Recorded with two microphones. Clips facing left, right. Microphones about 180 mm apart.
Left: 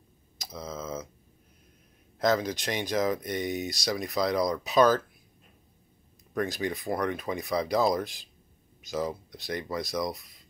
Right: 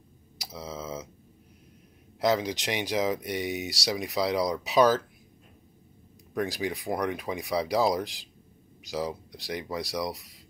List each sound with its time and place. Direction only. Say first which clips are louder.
0.4 s tick: even; 10° right (ahead or behind)
2.1 s speech: even; 15° right (ahead or behind)
6.3 s speech: even; 10° right (ahead or behind)